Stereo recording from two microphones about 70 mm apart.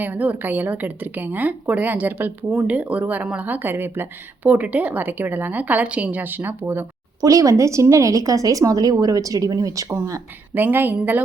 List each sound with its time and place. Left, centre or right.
0.0 s a woman's voice: right
7.2 s a woman's voice: right
10.5 s a woman's voice: right